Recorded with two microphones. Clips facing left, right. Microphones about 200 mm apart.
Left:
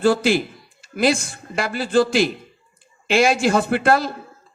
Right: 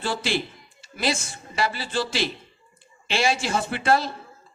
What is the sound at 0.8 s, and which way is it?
Music, 55° left (ahead or behind).